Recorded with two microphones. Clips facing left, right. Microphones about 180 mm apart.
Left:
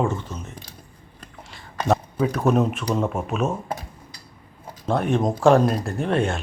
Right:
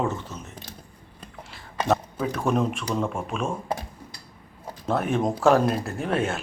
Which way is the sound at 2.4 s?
5° left (ahead or behind).